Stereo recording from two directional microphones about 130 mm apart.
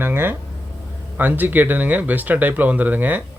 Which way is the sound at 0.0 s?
15° right (ahead or behind).